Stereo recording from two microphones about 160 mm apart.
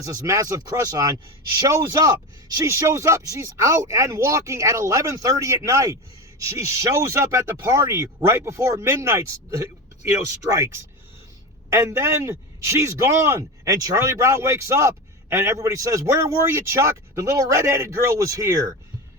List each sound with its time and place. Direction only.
0.0 s speech: 20° right (ahead or behind)